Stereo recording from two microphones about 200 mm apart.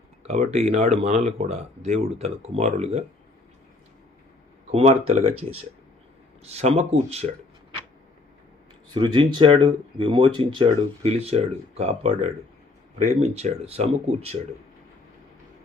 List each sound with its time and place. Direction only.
0.2 s speech: 30° right (ahead or behind)
4.7 s speech: 30° right (ahead or behind)
8.9 s speech: 20° right (ahead or behind)